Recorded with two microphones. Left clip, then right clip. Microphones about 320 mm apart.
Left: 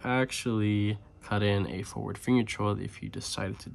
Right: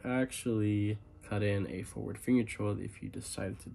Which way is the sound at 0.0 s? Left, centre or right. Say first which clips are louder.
Left 5 dB; centre.